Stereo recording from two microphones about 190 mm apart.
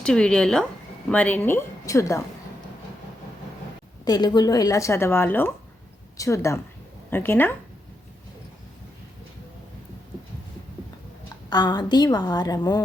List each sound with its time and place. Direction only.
0.0 s a woman's voice: 5° left (ahead or behind)
4.0 s a woman's voice: 20° left (ahead or behind)
11.4 s a woman's voice: 20° left (ahead or behind)